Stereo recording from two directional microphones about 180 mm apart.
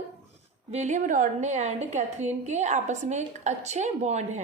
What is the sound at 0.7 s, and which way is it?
A woman's voice, 40° right (ahead or behind).